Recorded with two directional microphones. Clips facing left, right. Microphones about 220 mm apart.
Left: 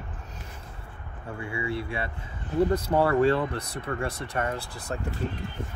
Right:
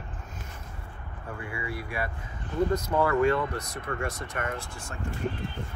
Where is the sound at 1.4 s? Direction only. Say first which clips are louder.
Left 6 dB; 25° left (ahead or behind).